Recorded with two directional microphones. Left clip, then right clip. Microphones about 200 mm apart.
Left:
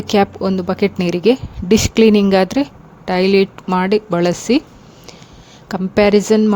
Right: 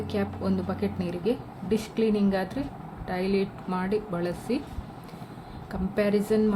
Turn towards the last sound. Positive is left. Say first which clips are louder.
# left 12 dB
turn(degrees=50)  # may be behind; listen again after turning